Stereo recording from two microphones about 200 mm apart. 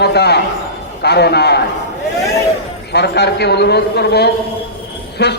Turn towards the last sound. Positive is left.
turn(degrees=55)  # may be behind; listen again after turning